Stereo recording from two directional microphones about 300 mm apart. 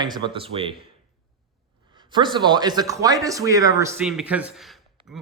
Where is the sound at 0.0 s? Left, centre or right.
Centre.